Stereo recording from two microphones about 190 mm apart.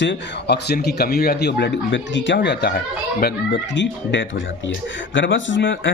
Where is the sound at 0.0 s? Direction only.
65° left (ahead or behind).